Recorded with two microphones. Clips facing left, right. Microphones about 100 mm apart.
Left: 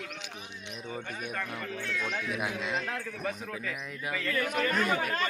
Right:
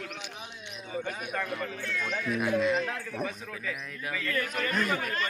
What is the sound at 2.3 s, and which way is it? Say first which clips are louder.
A man's voice: right 10 dB; 15° left (ahead or behind).